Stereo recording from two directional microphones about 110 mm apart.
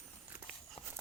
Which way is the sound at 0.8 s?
55° left (ahead or behind).